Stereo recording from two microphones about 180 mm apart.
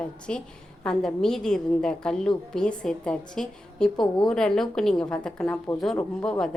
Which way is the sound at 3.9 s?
25° left (ahead or behind).